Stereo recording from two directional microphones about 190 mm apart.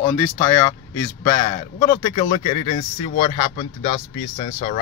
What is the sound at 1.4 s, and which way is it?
Speech, 25° left (ahead or behind).